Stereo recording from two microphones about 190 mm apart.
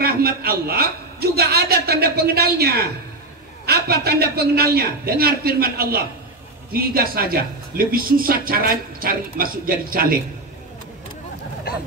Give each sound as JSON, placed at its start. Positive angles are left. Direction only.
{"t": 0.0, "sound": "a man's voice", "side_deg": -50}